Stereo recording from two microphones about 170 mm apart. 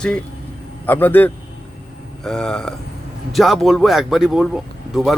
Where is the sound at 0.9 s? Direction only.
10° left (ahead or behind).